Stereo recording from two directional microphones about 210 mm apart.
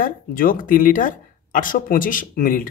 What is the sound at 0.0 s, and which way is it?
Speech, 40° left (ahead or behind).